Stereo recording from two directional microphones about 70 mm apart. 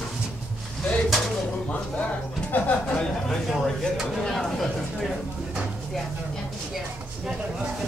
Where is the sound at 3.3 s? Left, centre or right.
Centre.